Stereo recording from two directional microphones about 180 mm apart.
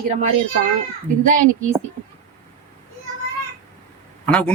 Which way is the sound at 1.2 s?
45° right (ahead or behind).